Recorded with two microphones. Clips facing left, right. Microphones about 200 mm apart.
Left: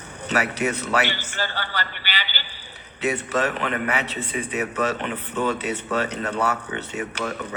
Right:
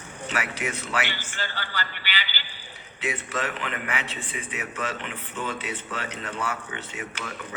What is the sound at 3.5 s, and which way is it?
Speech, 45° left (ahead or behind).